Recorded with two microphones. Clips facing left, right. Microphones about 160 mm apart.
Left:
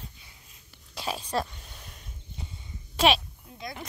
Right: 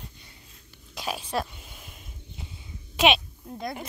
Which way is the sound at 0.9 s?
5° right (ahead or behind).